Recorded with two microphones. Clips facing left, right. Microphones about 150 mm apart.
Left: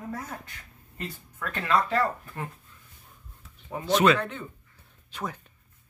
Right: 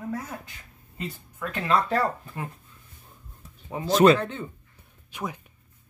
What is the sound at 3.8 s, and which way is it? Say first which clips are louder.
Speech: right 4 dB; 35° right (ahead or behind).